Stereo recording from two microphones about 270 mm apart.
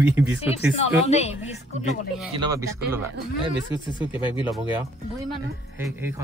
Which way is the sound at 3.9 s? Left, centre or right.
Centre.